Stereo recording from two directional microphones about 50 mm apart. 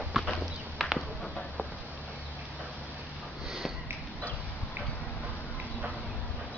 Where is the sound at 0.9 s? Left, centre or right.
Left.